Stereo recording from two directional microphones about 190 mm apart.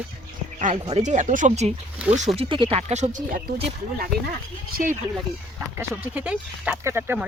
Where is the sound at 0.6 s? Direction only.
35° right (ahead or behind).